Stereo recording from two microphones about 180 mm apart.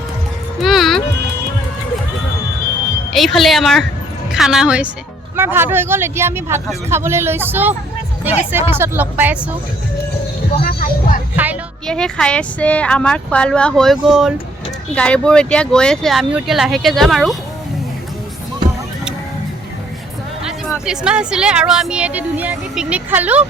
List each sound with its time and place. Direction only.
0.6 s music: centre (ahead or behind)
3.1 s a woman's voice: centre (ahead or behind)
10.6 s music: 50° left (ahead or behind)
11.9 s speech: 5° left (ahead or behind)
20.8 s speech: 5° right (ahead or behind)